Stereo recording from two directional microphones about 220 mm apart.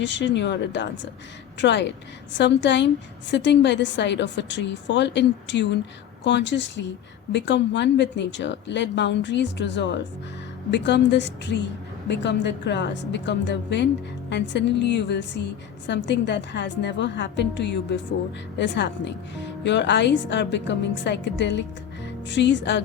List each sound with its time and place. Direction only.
0.0 s a woman's voice: 55° left (ahead or behind)